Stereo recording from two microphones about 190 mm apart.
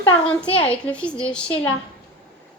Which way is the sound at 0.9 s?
5° left (ahead or behind).